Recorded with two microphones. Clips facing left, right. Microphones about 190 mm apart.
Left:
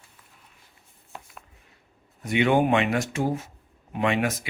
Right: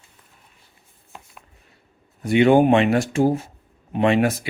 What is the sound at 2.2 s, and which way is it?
Speech, 35° right (ahead or behind).